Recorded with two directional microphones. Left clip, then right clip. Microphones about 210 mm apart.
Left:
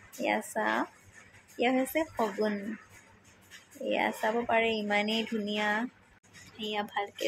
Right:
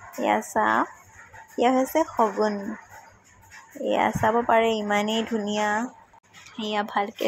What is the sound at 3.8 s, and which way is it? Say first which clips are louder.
Speech: right 7 dB; 15° right (ahead or behind).